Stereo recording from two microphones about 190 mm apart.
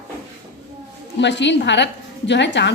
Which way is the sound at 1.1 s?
65° left (ahead or behind).